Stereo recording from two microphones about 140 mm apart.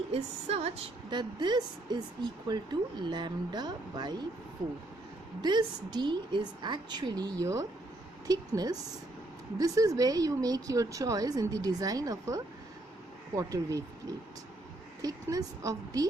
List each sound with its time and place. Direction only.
0.1 s a woman's voice: 45° right (ahead or behind)
1.1 s speech: 30° right (ahead or behind)
5.4 s speech: 30° right (ahead or behind)
15.0 s speech: 25° right (ahead or behind)